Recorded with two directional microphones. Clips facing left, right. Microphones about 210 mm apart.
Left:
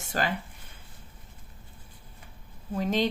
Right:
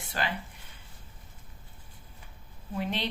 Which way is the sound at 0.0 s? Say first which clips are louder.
Left 4 dB; 45° left (ahead or behind).